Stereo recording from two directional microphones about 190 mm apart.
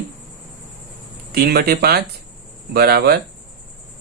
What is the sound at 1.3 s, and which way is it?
Speech, 60° right (ahead or behind).